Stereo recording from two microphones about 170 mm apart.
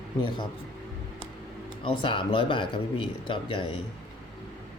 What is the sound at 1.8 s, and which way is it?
A man's voice, 30° left (ahead or behind).